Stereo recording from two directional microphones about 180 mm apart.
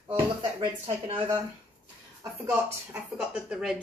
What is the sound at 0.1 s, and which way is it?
Speech, 30° right (ahead or behind).